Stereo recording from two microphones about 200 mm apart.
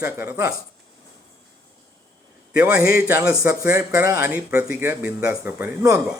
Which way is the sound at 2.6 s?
10° right (ahead or behind).